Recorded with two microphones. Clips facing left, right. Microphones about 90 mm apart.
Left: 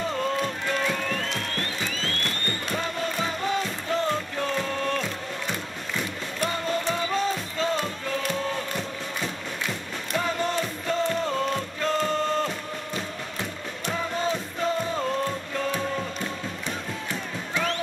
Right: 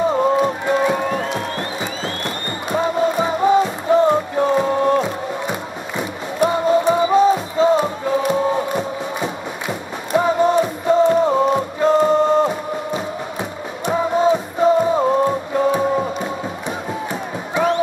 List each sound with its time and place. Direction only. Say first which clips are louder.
0.0 s music: right 11 dB; 20° right (ahead or behind)
17.6 s music: right 10 dB; 15° right (ahead or behind)